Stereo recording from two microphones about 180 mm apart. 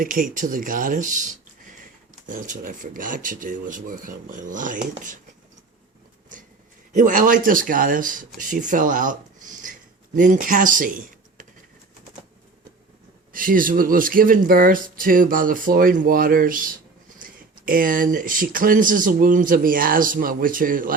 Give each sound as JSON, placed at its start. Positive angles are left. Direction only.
{"t": 0.0, "sound": "speech", "side_deg": -50}
{"t": 6.9, "sound": "speech", "side_deg": -45}
{"t": 13.3, "sound": "speech", "side_deg": -50}